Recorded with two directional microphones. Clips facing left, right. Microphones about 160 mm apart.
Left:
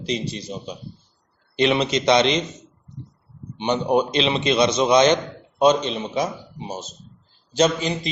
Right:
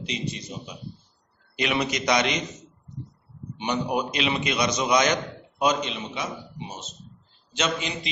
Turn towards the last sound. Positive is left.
turn(degrees=35)  # may be behind; listen again after turning